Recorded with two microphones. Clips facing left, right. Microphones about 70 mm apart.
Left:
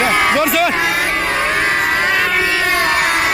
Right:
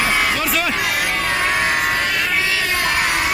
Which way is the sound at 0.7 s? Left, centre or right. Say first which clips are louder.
Left 4 dB; left.